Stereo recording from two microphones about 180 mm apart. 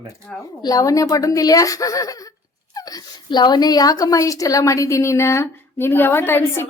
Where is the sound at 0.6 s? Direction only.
20° left (ahead or behind).